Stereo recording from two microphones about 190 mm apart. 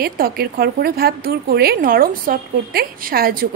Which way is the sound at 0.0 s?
55° right (ahead or behind).